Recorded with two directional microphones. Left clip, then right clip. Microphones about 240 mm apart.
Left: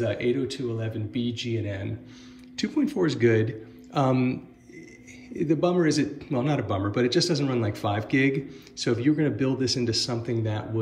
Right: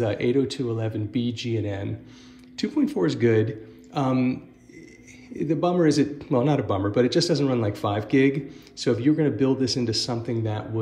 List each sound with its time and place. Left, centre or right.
0.0 s a man's voice: centre